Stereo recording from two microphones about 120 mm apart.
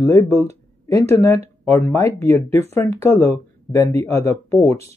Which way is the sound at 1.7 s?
25° left (ahead or behind).